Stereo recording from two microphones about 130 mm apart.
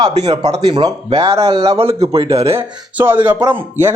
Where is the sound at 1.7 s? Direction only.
50° right (ahead or behind).